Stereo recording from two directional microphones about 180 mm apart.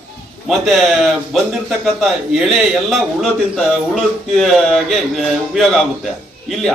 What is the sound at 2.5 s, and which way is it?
A man's voice, centre (ahead or behind).